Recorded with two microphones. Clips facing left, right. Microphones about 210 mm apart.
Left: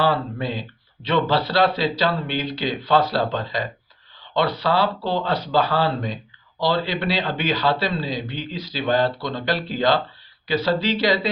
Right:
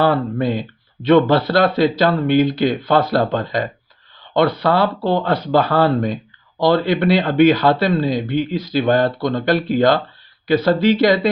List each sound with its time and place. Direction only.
0.0 s speech: 50° right (ahead or behind)